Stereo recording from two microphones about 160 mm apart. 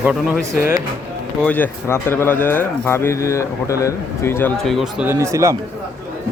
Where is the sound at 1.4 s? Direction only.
10° left (ahead or behind).